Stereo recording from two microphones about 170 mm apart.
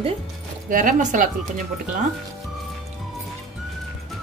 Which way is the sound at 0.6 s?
50° right (ahead or behind).